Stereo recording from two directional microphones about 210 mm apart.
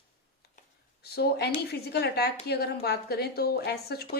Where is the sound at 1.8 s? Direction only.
50° left (ahead or behind).